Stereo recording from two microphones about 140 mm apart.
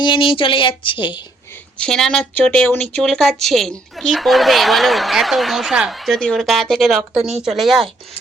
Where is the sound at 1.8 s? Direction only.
5° left (ahead or behind).